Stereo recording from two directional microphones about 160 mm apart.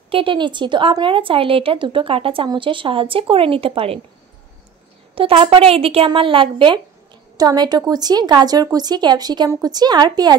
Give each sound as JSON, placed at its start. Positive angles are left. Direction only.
{"t": 0.1, "sound": "a woman's voice", "side_deg": -30}
{"t": 5.1, "sound": "a woman's voice", "side_deg": -35}